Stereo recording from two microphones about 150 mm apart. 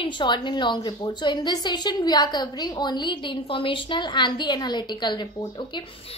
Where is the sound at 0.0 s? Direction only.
30° left (ahead or behind).